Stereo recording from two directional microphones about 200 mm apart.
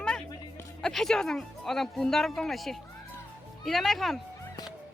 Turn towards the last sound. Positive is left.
turn(degrees=0)  # may be behind; listen again after turning